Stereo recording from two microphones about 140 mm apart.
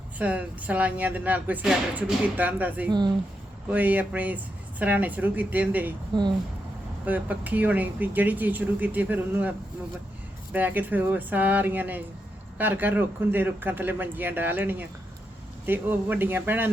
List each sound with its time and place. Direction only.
0.2 s speech: 10° right (ahead or behind)
6.1 s speech: 30° right (ahead or behind)
7.0 s speech: 10° right (ahead or behind)